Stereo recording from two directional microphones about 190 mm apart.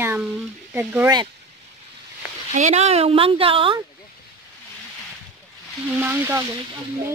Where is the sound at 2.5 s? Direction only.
35° right (ahead or behind).